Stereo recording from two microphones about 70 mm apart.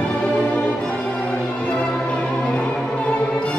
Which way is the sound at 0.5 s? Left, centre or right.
Centre.